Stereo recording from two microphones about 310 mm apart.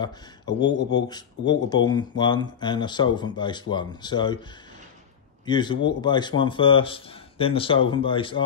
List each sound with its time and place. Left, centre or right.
0.0 s speech: centre
5.4 s a man's voice: centre